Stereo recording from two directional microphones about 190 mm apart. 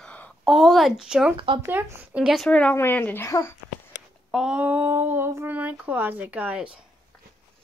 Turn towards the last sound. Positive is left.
turn(degrees=-10)  # may be behind; listen again after turning